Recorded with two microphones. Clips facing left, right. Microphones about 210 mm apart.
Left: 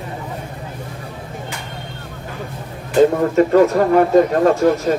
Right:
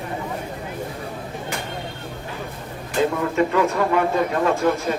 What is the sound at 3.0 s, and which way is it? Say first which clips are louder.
A man's voice: left 7 dB; 40° left (ahead or behind).